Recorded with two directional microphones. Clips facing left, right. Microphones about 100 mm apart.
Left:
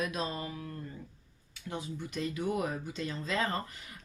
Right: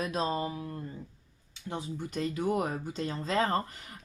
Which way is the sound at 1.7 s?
35° right (ahead or behind).